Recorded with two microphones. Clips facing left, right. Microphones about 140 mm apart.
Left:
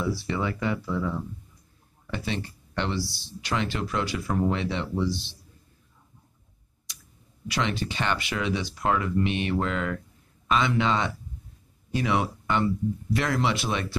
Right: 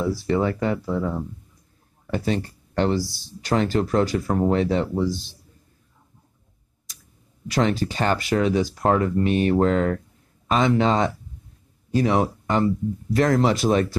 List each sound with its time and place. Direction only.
0.2 s speech: 40° right (ahead or behind)
6.9 s clicking: 45° right (ahead or behind)
7.4 s speech: 45° right (ahead or behind)